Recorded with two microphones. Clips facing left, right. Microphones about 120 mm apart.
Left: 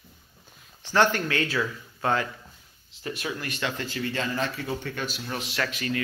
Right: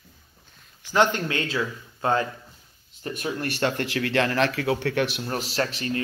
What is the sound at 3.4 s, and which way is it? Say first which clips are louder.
Speech: right 6 dB; 55° right (ahead or behind).